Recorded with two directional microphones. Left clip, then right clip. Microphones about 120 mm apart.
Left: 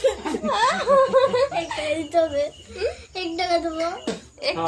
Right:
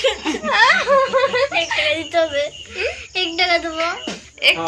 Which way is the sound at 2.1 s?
10° left (ahead or behind).